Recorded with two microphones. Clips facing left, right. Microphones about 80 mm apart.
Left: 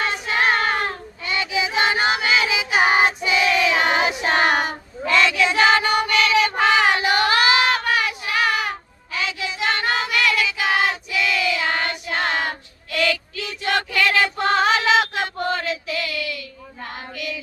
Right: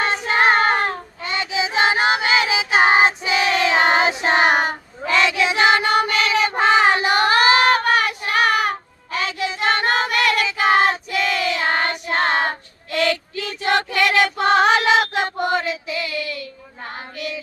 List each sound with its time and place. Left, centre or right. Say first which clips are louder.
0.0 s child singing: right 3 dB; right
4.6 s child singing: right 2 dB; right
14.4 s female singing: right 4 dB; right
15.2 s child singing: right 3 dB; centre
16.8 s female singing: right 1 dB; right